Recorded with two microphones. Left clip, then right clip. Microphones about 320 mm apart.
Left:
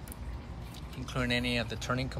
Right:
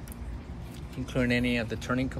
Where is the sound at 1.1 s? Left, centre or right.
Centre.